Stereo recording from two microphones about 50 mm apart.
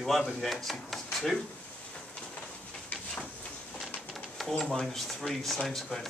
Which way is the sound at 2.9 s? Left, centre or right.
Left.